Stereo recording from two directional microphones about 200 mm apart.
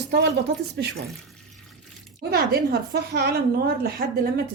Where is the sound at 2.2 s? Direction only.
50° right (ahead or behind).